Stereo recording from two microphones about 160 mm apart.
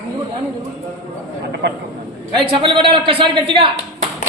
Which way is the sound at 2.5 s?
35° right (ahead or behind).